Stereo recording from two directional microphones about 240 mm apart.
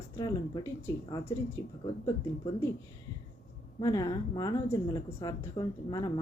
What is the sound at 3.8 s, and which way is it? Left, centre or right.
A woman's voice, centre.